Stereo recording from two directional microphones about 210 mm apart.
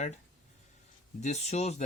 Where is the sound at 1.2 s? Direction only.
30° left (ahead or behind).